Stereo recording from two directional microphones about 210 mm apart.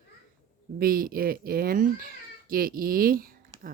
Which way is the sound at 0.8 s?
45° right (ahead or behind).